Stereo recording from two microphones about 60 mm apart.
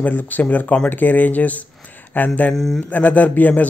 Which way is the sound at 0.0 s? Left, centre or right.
Left.